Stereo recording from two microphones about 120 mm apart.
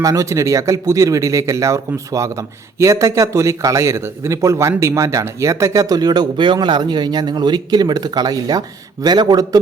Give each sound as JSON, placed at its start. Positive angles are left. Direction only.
{"t": 0.0, "sound": "speech", "side_deg": -30}